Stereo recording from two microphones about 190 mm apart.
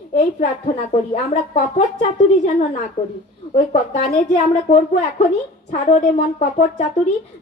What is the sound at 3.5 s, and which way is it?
A woman's voice, 35° left (ahead or behind).